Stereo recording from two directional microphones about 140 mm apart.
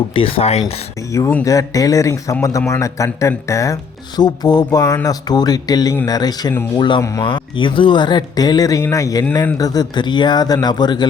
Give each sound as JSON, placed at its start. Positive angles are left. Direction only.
{"t": 0.1, "sound": "speech", "side_deg": 40}
{"t": 1.5, "sound": "speech", "side_deg": 25}